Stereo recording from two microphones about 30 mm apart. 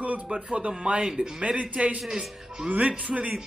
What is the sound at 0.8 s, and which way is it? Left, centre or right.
Speech, right.